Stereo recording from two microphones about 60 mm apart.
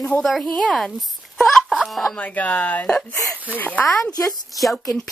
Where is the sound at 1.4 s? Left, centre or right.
Centre.